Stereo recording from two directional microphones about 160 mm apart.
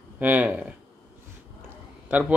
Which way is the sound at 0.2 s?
10° right (ahead or behind).